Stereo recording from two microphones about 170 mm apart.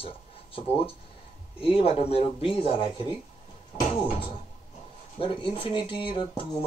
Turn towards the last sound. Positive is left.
turn(degrees=30)  # may be behind; listen again after turning